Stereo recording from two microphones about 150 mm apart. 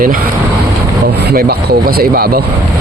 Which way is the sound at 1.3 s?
85° right.